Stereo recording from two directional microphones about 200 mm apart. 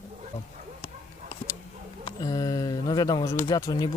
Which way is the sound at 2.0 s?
20° left (ahead or behind).